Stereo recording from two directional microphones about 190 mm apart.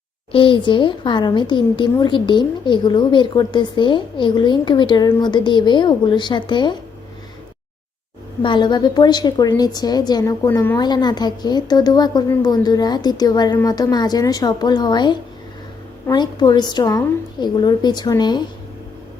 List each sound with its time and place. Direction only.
0.3 s a woman's voice: 25° left (ahead or behind)
8.4 s a woman's voice: 25° left (ahead or behind)